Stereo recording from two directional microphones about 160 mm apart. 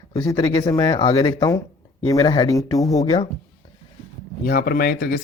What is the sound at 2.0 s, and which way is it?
A man's voice, 20° left (ahead or behind).